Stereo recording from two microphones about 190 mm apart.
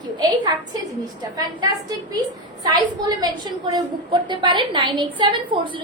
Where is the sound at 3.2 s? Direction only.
20° right (ahead or behind).